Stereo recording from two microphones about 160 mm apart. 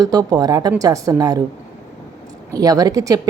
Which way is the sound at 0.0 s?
25° right (ahead or behind).